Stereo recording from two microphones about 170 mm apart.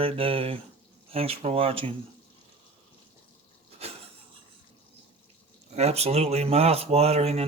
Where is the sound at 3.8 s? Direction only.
35° right (ahead or behind).